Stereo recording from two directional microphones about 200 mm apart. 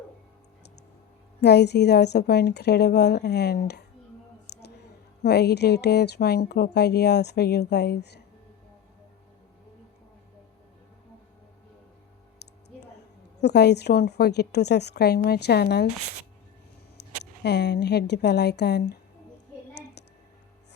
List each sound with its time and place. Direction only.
1.4 s speech: 55° left (ahead or behind)
5.2 s speech: 55° left (ahead or behind)
13.4 s speech: 55° left (ahead or behind)
17.4 s speech: 55° left (ahead or behind)
19.7 s a sound: 55° left (ahead or behind)